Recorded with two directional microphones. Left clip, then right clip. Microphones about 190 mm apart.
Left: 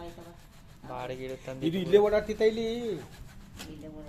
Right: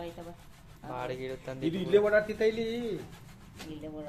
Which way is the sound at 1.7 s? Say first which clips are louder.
Left 2 dB; 35° left (ahead or behind).